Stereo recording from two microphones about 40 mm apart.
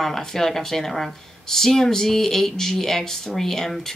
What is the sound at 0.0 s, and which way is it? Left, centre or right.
Speech, centre.